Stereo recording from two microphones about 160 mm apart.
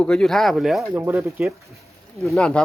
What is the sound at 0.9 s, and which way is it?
Speech, 15° right (ahead or behind).